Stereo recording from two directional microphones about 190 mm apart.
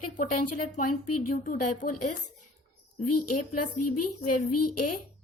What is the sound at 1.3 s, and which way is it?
Speech, 45° left (ahead or behind).